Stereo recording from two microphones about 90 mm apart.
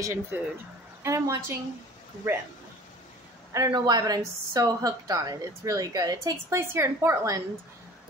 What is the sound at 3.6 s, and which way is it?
A woman's voice, 50° right (ahead or behind).